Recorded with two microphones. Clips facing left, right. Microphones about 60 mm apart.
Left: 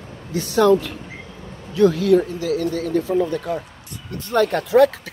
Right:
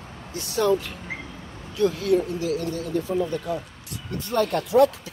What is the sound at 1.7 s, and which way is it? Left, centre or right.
Speech, left.